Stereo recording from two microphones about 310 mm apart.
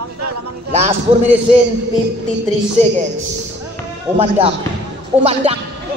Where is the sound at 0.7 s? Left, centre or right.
Right.